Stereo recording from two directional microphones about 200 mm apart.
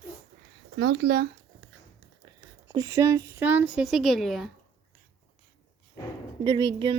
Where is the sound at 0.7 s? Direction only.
60° right (ahead or behind).